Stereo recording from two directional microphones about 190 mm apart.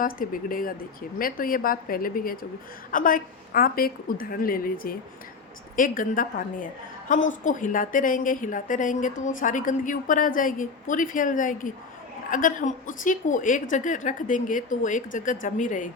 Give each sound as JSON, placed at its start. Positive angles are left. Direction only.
{"t": 0.0, "sound": "a woman's voice", "side_deg": 45}